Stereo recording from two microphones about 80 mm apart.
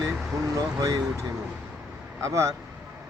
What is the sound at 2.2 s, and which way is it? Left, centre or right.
Speech, right.